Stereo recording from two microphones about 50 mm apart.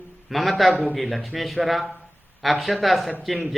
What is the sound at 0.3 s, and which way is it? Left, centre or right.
A man's voice, centre.